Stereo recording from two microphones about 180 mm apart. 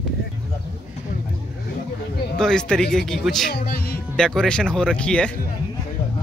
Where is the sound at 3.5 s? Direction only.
60° left (ahead or behind).